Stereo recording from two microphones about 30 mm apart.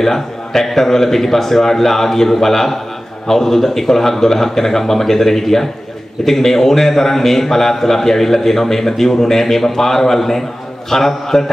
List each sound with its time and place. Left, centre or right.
0.0 s a man's voice: centre